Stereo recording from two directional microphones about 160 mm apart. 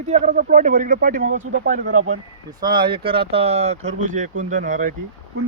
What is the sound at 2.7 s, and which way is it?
Speech, 30° right (ahead or behind).